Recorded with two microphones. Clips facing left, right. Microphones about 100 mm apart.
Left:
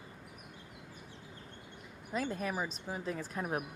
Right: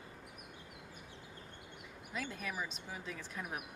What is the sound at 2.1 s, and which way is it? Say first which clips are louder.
Speech: left 6 dB; 40° left (ahead or behind).